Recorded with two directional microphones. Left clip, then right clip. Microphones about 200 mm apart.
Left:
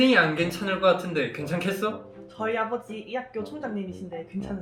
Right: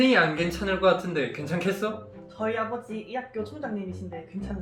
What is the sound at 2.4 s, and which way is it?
Speech, 40° left (ahead or behind).